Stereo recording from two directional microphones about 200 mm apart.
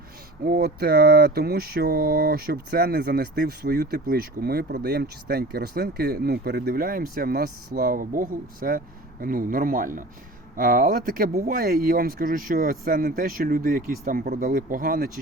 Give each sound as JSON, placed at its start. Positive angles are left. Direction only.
{"t": 0.4, "sound": "speech", "side_deg": -50}